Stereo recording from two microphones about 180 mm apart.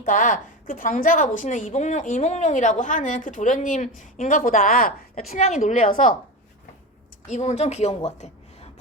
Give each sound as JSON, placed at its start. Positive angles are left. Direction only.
{"t": 0.0, "sound": "a woman's voice", "side_deg": 45}
{"t": 7.3, "sound": "a woman's voice", "side_deg": 40}